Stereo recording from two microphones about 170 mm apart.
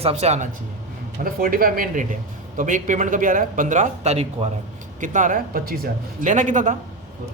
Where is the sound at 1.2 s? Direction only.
55° right (ahead or behind).